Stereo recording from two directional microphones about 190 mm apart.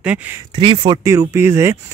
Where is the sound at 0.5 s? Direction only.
25° right (ahead or behind).